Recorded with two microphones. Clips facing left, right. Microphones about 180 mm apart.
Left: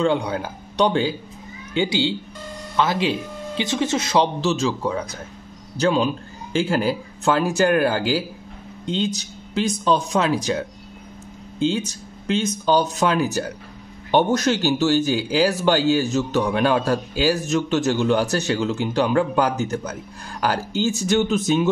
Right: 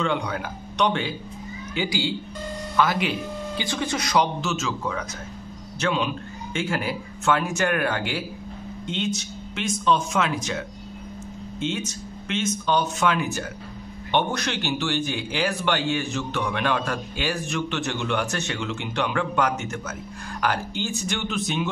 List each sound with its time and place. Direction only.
0.0 s a man's voice: 30° left (ahead or behind)
11.6 s a man's voice: 30° left (ahead or behind)